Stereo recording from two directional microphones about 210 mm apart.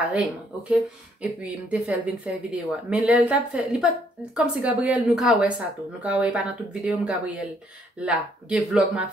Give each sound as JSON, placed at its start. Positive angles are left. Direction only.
{"t": 0.1, "sound": "speech", "side_deg": -5}